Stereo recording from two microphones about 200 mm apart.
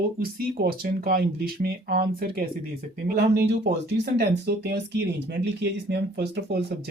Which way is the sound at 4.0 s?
55° right (ahead or behind).